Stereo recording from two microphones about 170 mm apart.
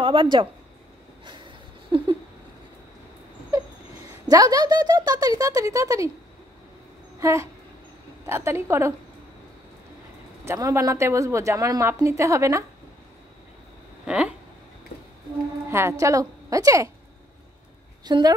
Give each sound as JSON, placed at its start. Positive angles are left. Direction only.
{"t": 0.0, "sound": "speech", "side_deg": -30}
{"t": 1.2, "sound": "a sound", "side_deg": -30}
{"t": 4.3, "sound": "speech", "side_deg": -20}
{"t": 7.2, "sound": "dog", "side_deg": -15}
{"t": 8.3, "sound": "a woman's voice", "side_deg": -15}
{"t": 10.4, "sound": "a woman's voice", "side_deg": -15}
{"t": 14.0, "sound": "a woman's voice", "side_deg": -5}
{"t": 15.7, "sound": "speech", "side_deg": -15}
{"t": 18.0, "sound": "speech", "side_deg": -25}